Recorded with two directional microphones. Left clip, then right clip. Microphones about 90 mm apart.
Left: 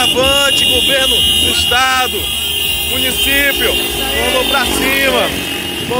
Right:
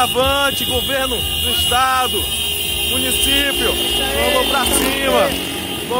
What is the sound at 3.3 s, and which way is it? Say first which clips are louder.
Speech: left 4 dB; 20° right (ahead or behind).